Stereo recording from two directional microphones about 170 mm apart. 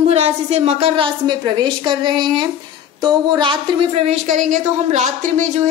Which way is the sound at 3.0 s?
25° right (ahead or behind).